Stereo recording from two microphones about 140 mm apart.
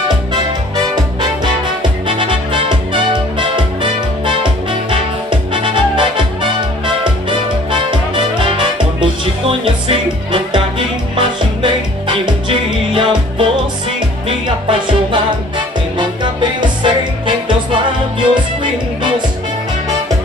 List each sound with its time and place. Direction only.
0.3 s music: 30° right (ahead or behind)
14.7 s music: 35° right (ahead or behind)
18.2 s music: 35° right (ahead or behind)